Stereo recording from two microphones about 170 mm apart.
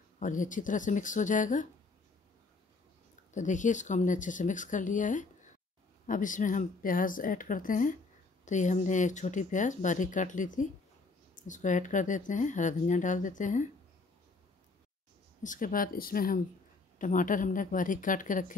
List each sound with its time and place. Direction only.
0.2 s speech: 50° left (ahead or behind)
3.3 s speech: 45° left (ahead or behind)
15.4 s speech: 50° left (ahead or behind)